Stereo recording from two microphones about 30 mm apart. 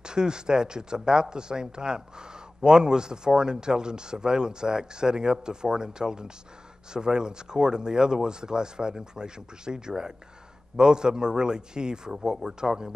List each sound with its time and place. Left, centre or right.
0.0 s speech: right